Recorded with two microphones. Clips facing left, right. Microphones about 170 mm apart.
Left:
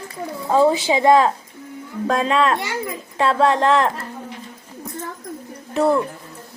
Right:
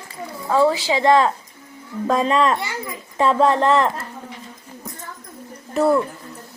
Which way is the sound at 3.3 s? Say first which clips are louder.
Even; 5° right (ahead or behind).